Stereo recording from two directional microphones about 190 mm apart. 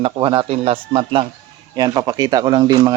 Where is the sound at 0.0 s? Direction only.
25° right (ahead or behind).